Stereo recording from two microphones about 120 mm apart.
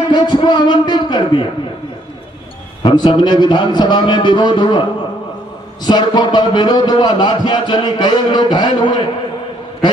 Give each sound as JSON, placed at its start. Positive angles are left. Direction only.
{"t": 0.1, "sound": "a sound", "side_deg": 40}
{"t": 2.8, "sound": "speech", "side_deg": 40}
{"t": 5.9, "sound": "speech", "side_deg": 35}